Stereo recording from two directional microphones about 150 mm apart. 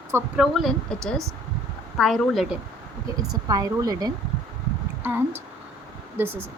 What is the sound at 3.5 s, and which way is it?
Speech, 25° right (ahead or behind).